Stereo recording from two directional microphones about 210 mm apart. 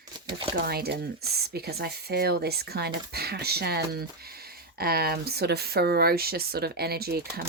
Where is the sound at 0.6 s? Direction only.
50° right (ahead or behind).